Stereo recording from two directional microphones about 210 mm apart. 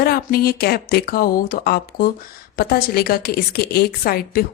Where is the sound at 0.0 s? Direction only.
45° left (ahead or behind).